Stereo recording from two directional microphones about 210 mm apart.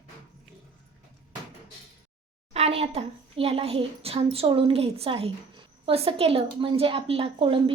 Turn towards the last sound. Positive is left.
turn(degrees=-25)  # may be behind; listen again after turning